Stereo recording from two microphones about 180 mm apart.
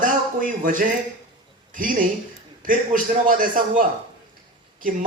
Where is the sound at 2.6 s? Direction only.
50° right (ahead or behind).